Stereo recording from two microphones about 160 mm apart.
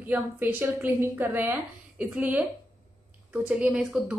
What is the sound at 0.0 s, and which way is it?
A woman's voice, 10° right (ahead or behind).